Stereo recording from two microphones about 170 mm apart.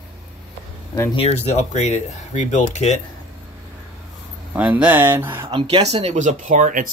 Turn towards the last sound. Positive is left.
turn(degrees=-50)  # may be behind; listen again after turning